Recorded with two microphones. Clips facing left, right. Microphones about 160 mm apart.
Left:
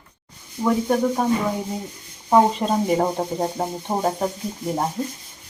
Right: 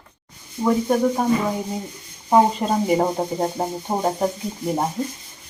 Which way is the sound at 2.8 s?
5° right (ahead or behind).